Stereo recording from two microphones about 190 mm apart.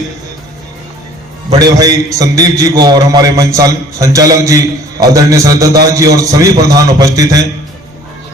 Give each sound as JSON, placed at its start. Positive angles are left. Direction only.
{"t": 1.5, "sound": "a man's voice", "side_deg": -20}